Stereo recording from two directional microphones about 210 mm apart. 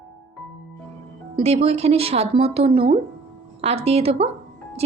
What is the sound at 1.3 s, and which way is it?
Speech, 30° right (ahead or behind).